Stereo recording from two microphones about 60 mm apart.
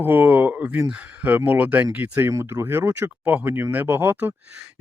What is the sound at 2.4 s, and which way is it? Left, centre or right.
Speech, right.